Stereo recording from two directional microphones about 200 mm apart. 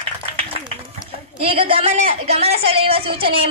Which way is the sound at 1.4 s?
25° right (ahead or behind).